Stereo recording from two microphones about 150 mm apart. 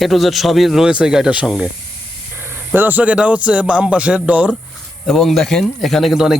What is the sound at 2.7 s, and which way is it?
Speech, 10° right (ahead or behind).